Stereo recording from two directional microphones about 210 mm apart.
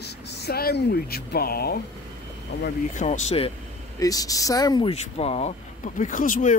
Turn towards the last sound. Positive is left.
turn(degrees=40)  # may be behind; listen again after turning